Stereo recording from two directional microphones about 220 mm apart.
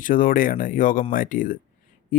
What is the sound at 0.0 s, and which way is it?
Speech, 40° left (ahead or behind).